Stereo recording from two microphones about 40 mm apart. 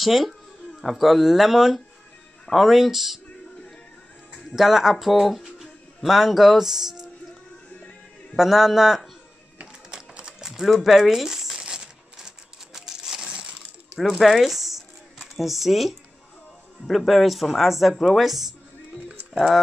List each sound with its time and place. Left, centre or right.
0.0 s speech: centre
4.6 s speech: centre
8.4 s speech: centre
9.8 s music: right
10.4 s speech: centre
11.6 s crumpling: centre
13.9 s a sound: centre
16.8 s speech: centre